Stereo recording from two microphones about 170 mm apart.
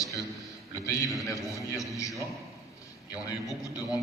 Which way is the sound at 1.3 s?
20° left (ahead or behind).